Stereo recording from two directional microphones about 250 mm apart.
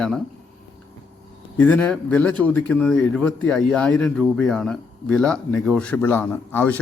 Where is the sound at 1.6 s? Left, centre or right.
Centre.